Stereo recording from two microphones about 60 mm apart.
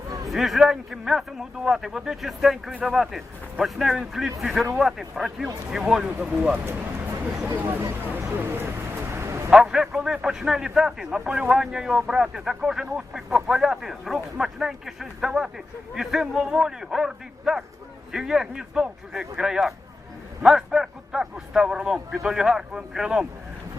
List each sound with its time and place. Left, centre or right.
0.3 s a man's voice: centre
6.0 s speech: centre
7.3 s speech: centre
7.5 s speech: right
8.4 s a sound: right
9.5 s speech: centre